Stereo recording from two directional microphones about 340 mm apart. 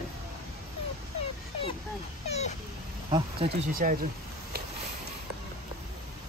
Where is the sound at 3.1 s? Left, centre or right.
Centre.